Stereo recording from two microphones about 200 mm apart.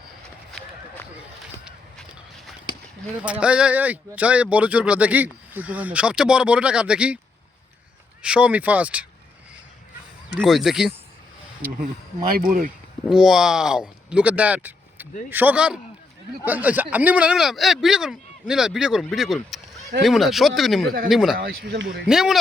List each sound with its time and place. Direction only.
3.2 s speech: 5° right (ahead or behind)
8.2 s speech: 5° right (ahead or behind)
10.2 s speech: centre (ahead or behind)
13.1 s speech: 5° right (ahead or behind)
21.3 s speech: 55° right (ahead or behind)
22.0 s speech: centre (ahead or behind)